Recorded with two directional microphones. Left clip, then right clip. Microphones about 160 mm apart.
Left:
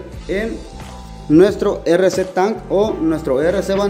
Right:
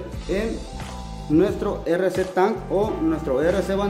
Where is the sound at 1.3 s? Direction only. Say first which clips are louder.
Left 8 dB; 45° left (ahead or behind).